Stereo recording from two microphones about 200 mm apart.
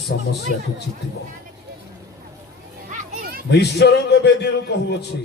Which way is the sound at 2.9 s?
40° right (ahead or behind).